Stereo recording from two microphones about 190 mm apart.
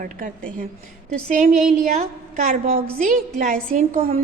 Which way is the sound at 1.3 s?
40° right (ahead or behind).